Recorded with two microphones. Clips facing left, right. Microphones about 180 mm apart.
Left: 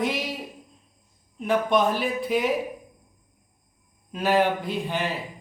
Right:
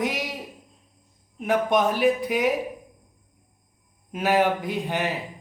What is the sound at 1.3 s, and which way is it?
Speech, 15° right (ahead or behind).